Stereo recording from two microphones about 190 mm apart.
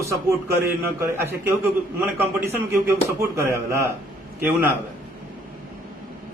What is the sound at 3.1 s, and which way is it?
Speech, 15° right (ahead or behind).